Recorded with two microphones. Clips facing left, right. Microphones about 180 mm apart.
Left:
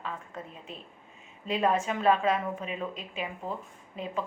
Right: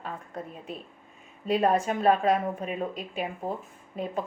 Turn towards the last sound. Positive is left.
turn(degrees=-40)  # may be behind; listen again after turning